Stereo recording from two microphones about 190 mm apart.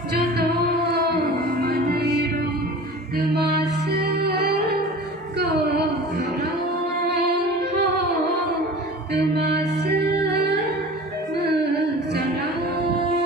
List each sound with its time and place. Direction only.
0.6 s music: 60° right (ahead or behind)
3.8 s music: 60° right (ahead or behind)
5.4 s a sound: 60° right (ahead or behind)
7.3 s music: 65° right (ahead or behind)